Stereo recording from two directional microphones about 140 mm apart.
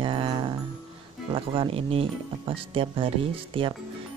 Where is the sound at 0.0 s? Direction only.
40° right (ahead or behind).